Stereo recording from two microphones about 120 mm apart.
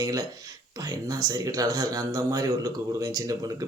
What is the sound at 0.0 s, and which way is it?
Speech, 30° right (ahead or behind).